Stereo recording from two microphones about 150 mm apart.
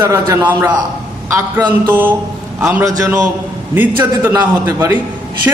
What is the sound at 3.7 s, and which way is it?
A man's voice, 15° right (ahead or behind).